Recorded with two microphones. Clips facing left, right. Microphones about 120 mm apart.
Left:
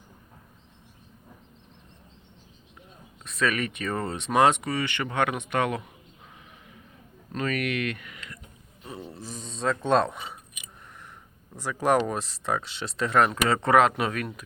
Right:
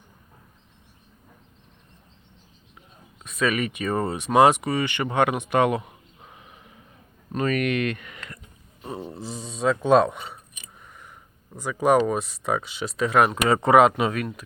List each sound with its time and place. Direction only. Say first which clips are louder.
3.2 s speech: right 3 dB; 5° right (ahead or behind)
7.3 s speech: right 5 dB; 40° right (ahead or behind)
8.8 s a sound: right 5 dB; 30° right (ahead or behind)
9.2 s speech: right 4 dB; 10° right (ahead or behind)
11.5 s speech: right 4 dB; centre (ahead or behind)